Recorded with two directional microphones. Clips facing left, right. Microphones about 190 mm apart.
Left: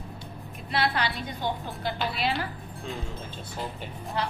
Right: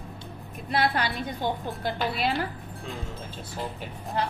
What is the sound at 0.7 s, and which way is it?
Speech, 50° right (ahead or behind).